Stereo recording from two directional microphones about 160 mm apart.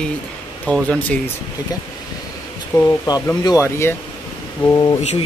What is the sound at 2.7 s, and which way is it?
Speech, 25° left (ahead or behind).